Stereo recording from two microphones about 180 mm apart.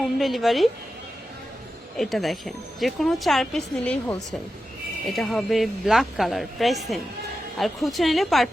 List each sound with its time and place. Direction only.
0.2 s a woman's voice: centre (ahead or behind)
2.0 s a woman's voice: centre (ahead or behind)